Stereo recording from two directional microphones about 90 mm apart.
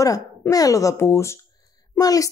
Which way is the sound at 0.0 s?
40° left (ahead or behind).